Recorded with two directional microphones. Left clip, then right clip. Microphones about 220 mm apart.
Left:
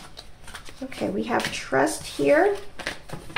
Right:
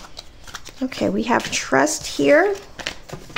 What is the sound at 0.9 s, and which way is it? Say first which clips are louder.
Speech: right 6 dB; 40° right (ahead or behind).